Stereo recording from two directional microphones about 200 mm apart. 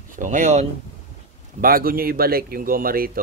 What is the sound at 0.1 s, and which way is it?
Speech, 40° right (ahead or behind).